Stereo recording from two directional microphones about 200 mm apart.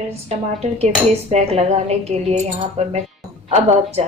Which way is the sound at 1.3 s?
30° right (ahead or behind).